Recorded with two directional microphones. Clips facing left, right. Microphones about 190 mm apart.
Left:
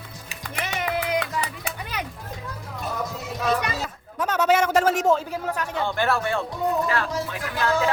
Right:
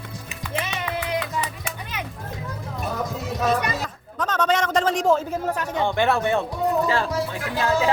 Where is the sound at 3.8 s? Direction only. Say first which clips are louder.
Even; 10° left (ahead or behind).